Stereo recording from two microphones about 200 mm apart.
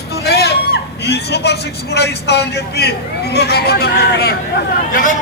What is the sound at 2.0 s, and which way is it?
A man's voice, 55° left (ahead or behind).